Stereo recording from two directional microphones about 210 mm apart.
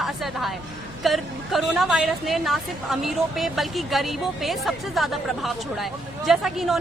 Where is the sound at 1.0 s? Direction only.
Centre (ahead or behind).